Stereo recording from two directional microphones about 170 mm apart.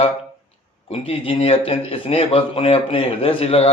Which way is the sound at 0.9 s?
35° left (ahead or behind).